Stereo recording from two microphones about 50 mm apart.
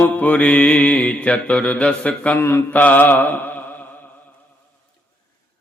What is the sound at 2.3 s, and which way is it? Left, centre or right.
Mantra, left.